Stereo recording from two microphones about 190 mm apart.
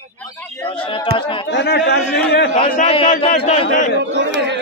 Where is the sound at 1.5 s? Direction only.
60° left (ahead or behind).